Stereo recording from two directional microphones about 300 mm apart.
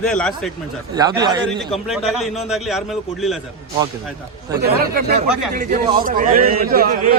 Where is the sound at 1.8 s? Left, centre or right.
Centre.